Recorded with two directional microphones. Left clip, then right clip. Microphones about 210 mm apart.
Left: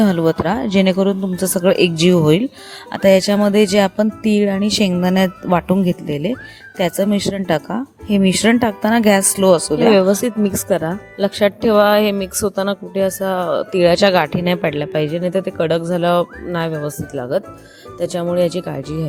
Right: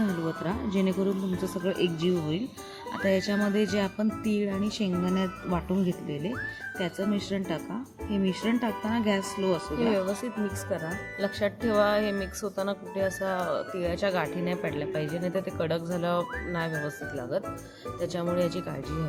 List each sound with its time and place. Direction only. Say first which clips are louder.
0.3 s speech: left 15 dB; 50° left (ahead or behind)